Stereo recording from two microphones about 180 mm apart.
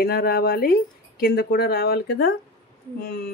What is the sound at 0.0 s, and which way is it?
Speech, 60° left (ahead or behind).